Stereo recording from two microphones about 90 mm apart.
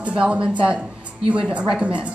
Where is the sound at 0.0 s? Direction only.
10° right (ahead or behind).